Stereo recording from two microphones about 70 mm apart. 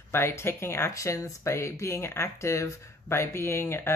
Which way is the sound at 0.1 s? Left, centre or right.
Left.